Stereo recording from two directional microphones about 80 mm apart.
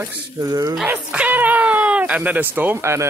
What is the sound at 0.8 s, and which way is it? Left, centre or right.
Speech, centre.